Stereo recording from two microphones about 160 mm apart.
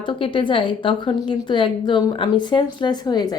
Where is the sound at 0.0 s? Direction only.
30° left (ahead or behind).